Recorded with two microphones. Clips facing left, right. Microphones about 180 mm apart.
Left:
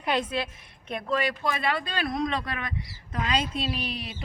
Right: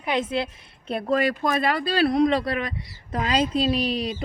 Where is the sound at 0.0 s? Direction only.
20° right (ahead or behind).